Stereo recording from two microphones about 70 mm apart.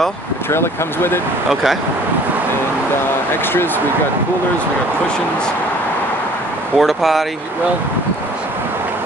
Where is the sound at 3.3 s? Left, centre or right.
Left.